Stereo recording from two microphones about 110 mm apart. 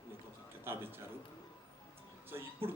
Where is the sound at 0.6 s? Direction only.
20° right (ahead or behind).